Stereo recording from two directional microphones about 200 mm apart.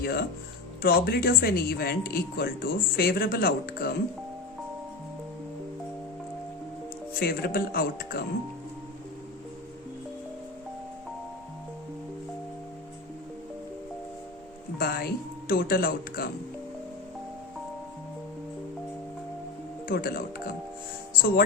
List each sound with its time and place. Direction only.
0.0 s speech: 50° left (ahead or behind)
7.2 s speech: 50° left (ahead or behind)
14.8 s speech: 50° left (ahead or behind)
19.9 s speech: 45° left (ahead or behind)